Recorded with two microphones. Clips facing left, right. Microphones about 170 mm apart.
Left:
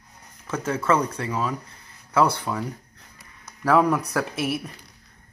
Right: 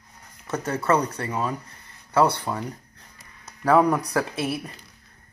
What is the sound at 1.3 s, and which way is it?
Speech, 25° right (ahead or behind).